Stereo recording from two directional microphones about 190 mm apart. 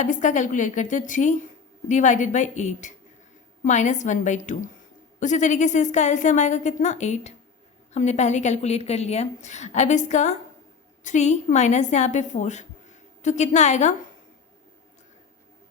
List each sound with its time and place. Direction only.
0.0 s a woman's voice: 40° left (ahead or behind)